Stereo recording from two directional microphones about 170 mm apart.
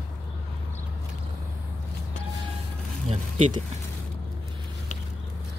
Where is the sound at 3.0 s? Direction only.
35° right (ahead or behind).